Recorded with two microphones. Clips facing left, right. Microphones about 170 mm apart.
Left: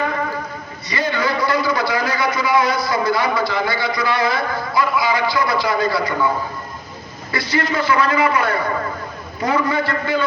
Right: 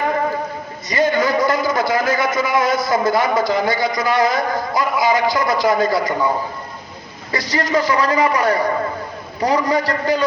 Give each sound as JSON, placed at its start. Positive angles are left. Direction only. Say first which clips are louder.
{"t": 0.9, "sound": "a man's voice", "louder": "right 4 dB", "side_deg": -45}
{"t": 7.3, "sound": "a man's voice", "louder": "right 2 dB", "side_deg": -40}